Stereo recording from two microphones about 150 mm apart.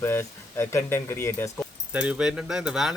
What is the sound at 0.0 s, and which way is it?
Speech, 15° left (ahead or behind).